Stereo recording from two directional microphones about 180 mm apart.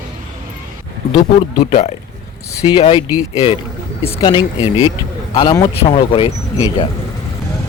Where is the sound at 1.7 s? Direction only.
40° left (ahead or behind); by 5.7 s 20° left (ahead or behind).